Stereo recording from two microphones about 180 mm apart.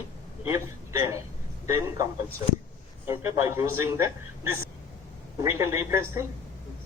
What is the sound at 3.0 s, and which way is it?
Speech, 15° right (ahead or behind).